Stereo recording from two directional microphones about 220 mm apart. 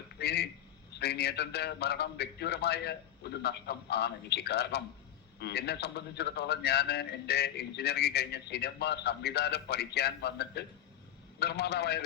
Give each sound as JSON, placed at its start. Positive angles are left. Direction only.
{"t": 0.2, "sound": "a man's voice", "side_deg": 45}